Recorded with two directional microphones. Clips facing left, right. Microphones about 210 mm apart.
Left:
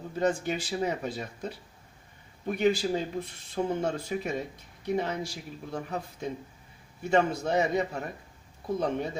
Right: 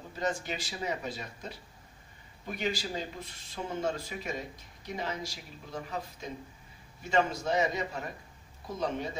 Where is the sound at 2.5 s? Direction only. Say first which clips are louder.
Left 8 dB; 55° left (ahead or behind).